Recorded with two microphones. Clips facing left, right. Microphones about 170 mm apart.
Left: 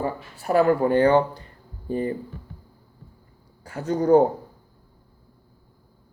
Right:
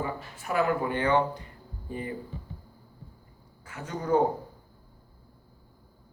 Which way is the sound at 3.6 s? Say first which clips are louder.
Left 11 dB; 35° left (ahead or behind).